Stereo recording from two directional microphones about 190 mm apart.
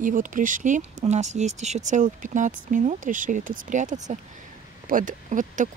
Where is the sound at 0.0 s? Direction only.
45° right (ahead or behind).